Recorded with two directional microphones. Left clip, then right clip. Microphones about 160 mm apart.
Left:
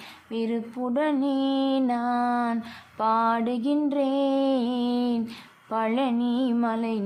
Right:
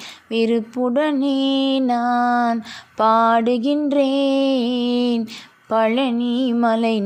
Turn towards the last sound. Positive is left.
turn(degrees=-35)  # may be behind; listen again after turning